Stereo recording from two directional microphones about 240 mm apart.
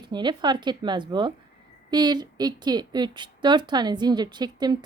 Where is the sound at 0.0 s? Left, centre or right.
Centre.